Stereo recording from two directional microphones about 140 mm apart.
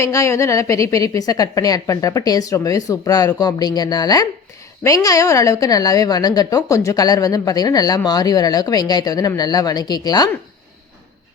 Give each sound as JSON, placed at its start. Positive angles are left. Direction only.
{"t": 0.0, "sound": "a woman's voice", "side_deg": 20}